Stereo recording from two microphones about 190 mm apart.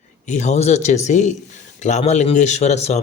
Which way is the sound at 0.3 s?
35° left (ahead or behind).